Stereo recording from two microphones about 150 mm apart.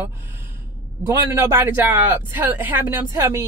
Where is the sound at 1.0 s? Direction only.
15° right (ahead or behind).